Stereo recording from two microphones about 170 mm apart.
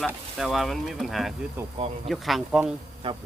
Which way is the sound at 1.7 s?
35° right (ahead or behind).